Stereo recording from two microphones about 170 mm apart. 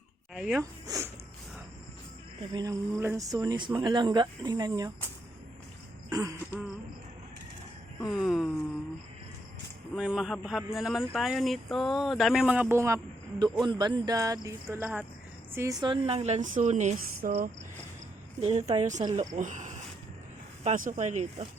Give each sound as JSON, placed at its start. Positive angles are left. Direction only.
{"t": 0.3, "sound": "speech", "side_deg": -5}
{"t": 0.6, "sound": "speech", "side_deg": -15}
{"t": 2.5, "sound": "speech", "side_deg": -20}
{"t": 6.1, "sound": "throat clearing", "side_deg": -20}
{"t": 8.1, "sound": "a man's voice", "side_deg": 0}
{"t": 9.9, "sound": "a man's voice", "side_deg": -5}
{"t": 18.3, "sound": "a woman's voice", "side_deg": -40}